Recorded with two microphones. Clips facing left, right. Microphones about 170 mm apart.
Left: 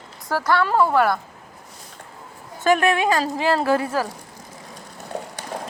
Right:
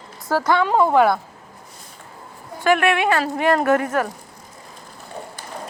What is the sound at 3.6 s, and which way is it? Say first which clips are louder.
Speech: right 2 dB; 30° left (ahead or behind).